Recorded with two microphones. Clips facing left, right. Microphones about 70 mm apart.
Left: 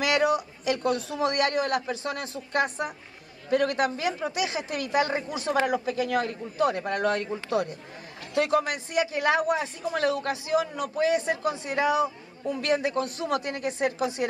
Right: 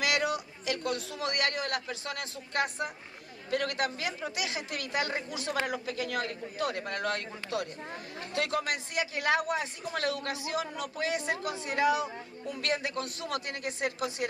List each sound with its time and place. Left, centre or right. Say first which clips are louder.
0.0 s speech: left 6 dB; left